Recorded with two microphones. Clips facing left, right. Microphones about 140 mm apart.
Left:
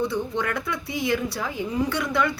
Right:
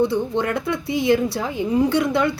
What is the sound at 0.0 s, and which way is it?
A woman's voice, 25° right (ahead or behind).